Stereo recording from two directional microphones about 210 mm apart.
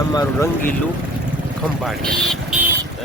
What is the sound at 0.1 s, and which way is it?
Speech, 15° left (ahead or behind).